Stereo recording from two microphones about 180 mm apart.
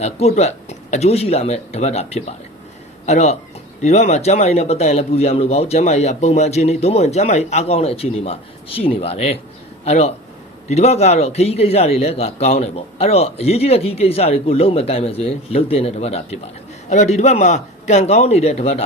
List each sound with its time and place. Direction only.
0.0 s a man's voice: 35° left (ahead or behind)